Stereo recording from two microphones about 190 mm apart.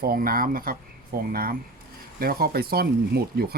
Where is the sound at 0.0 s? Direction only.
50° right (ahead or behind).